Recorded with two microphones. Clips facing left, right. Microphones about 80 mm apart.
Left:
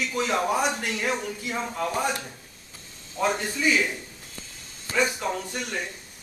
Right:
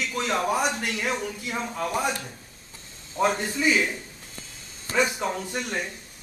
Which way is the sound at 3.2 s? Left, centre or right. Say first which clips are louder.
Right 1 dB; centre.